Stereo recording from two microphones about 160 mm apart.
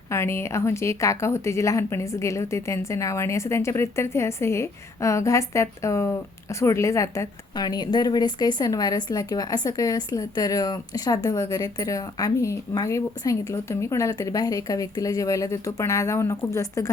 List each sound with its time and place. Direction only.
0.1 s a woman's voice: 15° left (ahead or behind)